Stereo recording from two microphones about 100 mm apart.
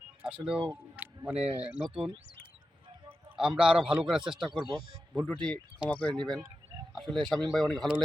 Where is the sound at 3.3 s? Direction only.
5° right (ahead or behind).